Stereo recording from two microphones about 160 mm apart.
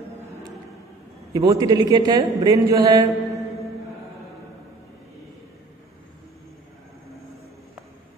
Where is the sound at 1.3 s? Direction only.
20° right (ahead or behind).